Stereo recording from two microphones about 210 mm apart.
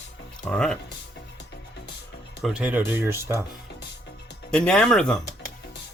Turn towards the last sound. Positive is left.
turn(degrees=5)  # may be behind; listen again after turning